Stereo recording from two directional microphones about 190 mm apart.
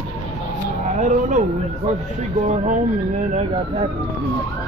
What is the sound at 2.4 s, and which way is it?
Speech, 35° right (ahead or behind).